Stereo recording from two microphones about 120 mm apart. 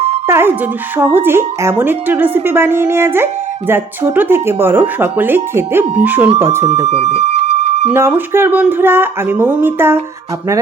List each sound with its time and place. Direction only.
0.3 s speech: 20° right (ahead or behind)
6.8 s speech: 65° right (ahead or behind)
7.9 s speech: 20° right (ahead or behind)